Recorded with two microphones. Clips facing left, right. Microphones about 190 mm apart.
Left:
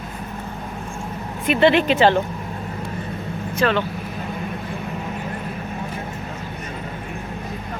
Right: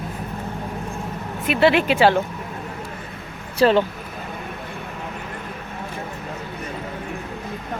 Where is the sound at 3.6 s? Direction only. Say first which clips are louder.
Right 4 dB; 35° right (ahead or behind).